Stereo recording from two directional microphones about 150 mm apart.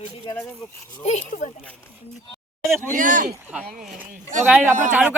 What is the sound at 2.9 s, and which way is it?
Speech, 60° right (ahead or behind).